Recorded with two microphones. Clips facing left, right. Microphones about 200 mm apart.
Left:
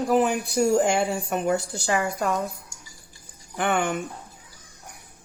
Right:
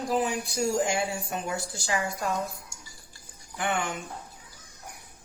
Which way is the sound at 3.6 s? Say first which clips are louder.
Left 5 dB; 60° left (ahead or behind).